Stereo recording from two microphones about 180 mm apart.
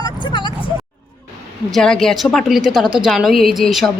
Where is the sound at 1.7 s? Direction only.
5° left (ahead or behind).